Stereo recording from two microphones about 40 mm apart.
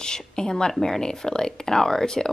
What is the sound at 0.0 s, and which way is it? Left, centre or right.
A woman's voice, centre.